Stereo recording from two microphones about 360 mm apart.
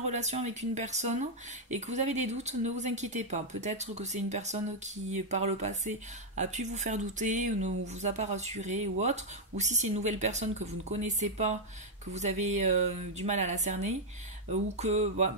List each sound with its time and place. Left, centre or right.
0.0 s speech: centre